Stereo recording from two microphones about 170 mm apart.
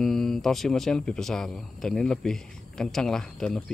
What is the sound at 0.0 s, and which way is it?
Speech, centre (ahead or behind).